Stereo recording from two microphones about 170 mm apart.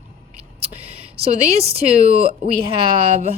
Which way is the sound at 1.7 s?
35° right (ahead or behind).